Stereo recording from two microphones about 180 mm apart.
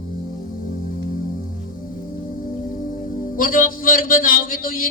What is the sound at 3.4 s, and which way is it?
Speech, 50° left (ahead or behind).